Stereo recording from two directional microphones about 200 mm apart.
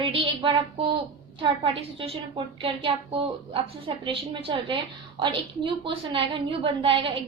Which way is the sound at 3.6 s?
25° right (ahead or behind).